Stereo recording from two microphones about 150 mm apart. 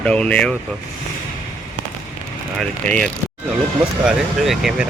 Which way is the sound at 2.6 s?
5° left (ahead or behind).